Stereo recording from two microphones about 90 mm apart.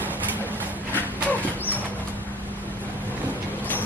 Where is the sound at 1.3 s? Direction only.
20° left (ahead or behind).